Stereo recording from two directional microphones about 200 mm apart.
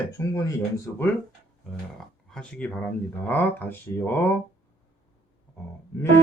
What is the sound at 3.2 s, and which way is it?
Music, 10° left (ahead or behind).